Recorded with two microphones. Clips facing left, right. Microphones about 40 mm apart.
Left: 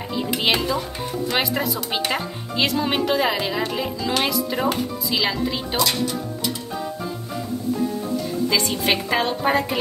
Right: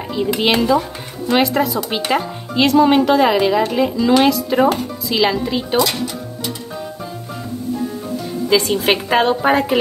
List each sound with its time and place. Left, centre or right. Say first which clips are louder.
0.1 s speech: right 5 dB; centre
8.5 s speech: right 8 dB; centre
8.9 s a woman's voice: right 8 dB; centre